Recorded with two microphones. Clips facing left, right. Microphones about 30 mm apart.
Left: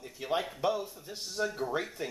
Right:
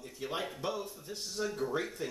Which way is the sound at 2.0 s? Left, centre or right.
Centre.